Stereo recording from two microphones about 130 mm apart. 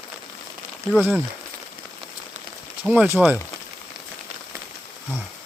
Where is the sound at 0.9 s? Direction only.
15° right (ahead or behind).